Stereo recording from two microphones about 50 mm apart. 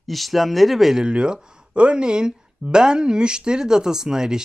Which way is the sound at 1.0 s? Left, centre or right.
Centre.